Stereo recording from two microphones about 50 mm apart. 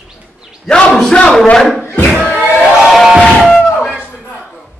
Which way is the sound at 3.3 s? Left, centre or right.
Centre.